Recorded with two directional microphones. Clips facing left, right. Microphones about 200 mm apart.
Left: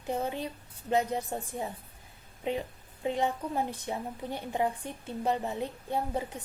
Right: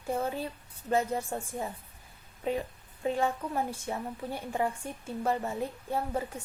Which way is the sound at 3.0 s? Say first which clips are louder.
Even; 20° left (ahead or behind).